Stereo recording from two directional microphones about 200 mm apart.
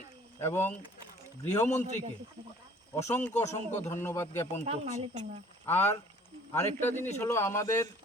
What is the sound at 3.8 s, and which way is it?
Speech, 15° left (ahead or behind).